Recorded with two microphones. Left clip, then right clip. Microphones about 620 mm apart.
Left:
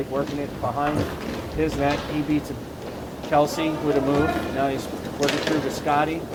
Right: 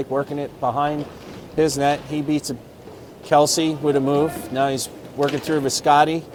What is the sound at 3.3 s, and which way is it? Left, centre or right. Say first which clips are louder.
A man's voice: right 4 dB; right.